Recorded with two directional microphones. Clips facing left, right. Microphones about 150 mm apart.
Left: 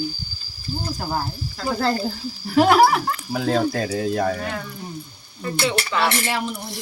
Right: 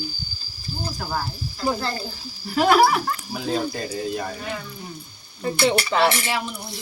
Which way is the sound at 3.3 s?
80° left.